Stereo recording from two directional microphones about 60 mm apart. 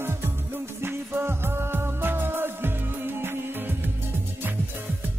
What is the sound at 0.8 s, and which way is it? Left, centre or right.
Music, right.